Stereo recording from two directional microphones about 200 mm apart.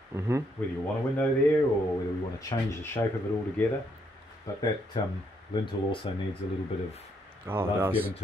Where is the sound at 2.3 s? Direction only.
15° left (ahead or behind).